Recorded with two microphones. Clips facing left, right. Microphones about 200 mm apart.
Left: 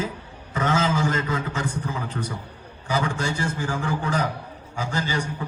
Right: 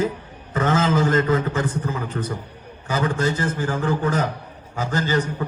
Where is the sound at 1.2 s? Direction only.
10° left (ahead or behind).